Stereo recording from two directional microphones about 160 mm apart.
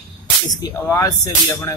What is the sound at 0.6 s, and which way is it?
Speech, 20° left (ahead or behind).